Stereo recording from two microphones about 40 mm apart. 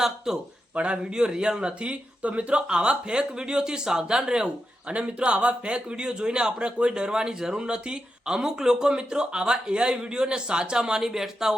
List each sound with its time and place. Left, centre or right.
0.3 s a man's voice: centre
0.7 s a man's voice: right; by 11.5 s centre